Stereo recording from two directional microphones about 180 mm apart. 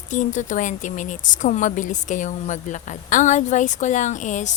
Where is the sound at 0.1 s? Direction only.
45° left (ahead or behind).